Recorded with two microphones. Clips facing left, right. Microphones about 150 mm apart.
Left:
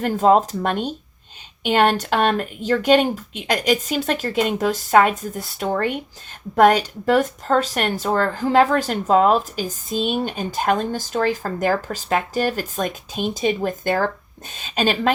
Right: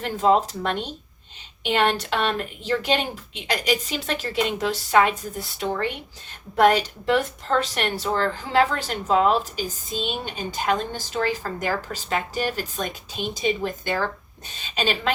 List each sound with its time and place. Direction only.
0.0 s speech: 45° left (ahead or behind)
5.0 s a woman's voice: centre (ahead or behind)
5.5 s speech: 45° left (ahead or behind)
9.9 s a woman's voice: centre (ahead or behind)
10.3 s speech: 50° left (ahead or behind)